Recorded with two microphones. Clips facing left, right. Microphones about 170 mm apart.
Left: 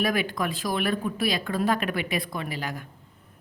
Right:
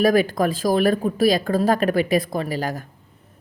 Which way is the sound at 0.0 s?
40° right (ahead or behind).